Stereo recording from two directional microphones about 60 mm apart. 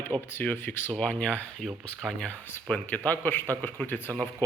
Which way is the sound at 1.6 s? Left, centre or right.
Centre.